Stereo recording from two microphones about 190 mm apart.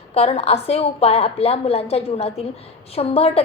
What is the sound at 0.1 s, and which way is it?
A woman's voice, 30° left (ahead or behind).